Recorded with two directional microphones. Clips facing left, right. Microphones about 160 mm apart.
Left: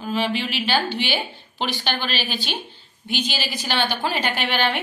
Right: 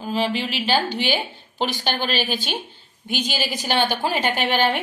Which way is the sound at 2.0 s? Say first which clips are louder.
Right 3 dB; 45° right (ahead or behind).